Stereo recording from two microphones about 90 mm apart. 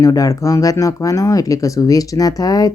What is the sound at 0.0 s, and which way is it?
Speech, 40° left (ahead or behind).